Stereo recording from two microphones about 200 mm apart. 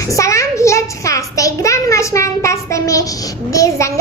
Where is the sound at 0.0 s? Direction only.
15° left (ahead or behind).